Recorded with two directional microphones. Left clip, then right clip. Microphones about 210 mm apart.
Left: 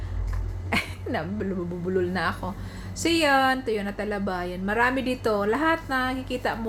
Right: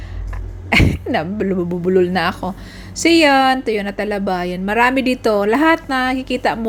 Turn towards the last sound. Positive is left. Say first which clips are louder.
# right 10 dB
turn(degrees=-30)  # may be behind; listen again after turning